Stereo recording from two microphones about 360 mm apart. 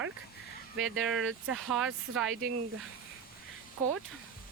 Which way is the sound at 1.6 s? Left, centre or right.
Centre.